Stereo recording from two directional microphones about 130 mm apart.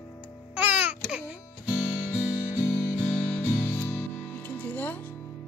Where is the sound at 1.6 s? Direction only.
20° left (ahead or behind).